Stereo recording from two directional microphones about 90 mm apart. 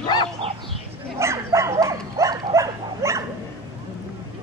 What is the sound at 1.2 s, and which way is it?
Dog, 30° right (ahead or behind).